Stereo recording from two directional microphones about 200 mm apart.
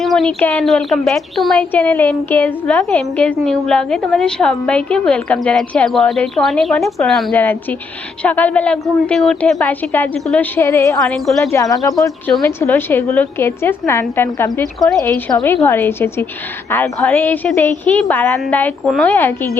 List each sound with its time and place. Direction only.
0.0 s a woman's voice: centre (ahead or behind)
11.0 s speech: centre (ahead or behind)
11.5 s a woman's voice: 15° left (ahead or behind)
14.8 s a woman's voice: centre (ahead or behind)